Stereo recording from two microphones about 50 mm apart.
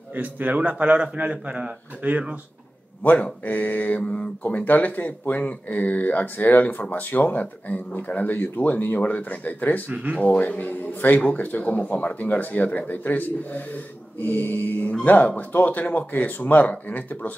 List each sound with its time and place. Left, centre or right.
0.1 s speech: right
3.0 s speech: left
4.0 s mantra: left
4.4 s speech: left